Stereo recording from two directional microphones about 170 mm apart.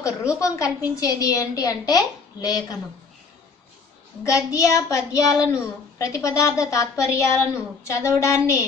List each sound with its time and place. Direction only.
0.0 s a woman's voice: 20° left (ahead or behind)
4.2 s a woman's voice: 20° left (ahead or behind)